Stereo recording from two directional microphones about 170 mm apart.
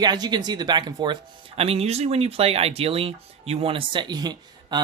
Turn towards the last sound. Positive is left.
turn(degrees=-25)  # may be behind; listen again after turning